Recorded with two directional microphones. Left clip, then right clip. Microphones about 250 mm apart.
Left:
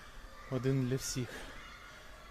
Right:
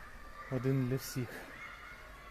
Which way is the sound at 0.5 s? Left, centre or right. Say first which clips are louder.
Left 1 dB; centre.